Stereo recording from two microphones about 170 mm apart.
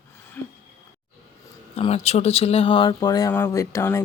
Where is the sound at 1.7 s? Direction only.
35° left (ahead or behind).